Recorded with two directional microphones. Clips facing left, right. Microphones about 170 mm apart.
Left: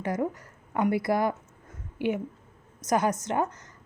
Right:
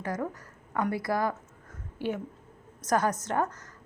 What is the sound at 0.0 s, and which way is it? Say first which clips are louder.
A woman's voice: left 4 dB; 20° left (ahead or behind).